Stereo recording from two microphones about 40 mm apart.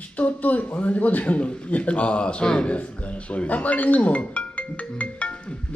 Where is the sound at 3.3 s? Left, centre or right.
Left.